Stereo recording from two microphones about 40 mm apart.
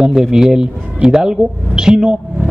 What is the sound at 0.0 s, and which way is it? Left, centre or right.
A man's voice, centre.